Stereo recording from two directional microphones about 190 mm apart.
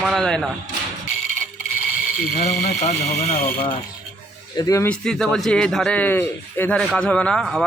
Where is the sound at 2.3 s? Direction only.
60° left (ahead or behind).